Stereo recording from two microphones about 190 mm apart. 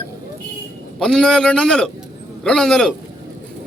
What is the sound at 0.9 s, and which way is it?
A man's voice, centre (ahead or behind).